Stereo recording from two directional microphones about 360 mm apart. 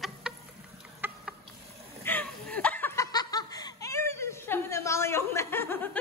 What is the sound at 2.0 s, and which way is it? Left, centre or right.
Laughter, centre.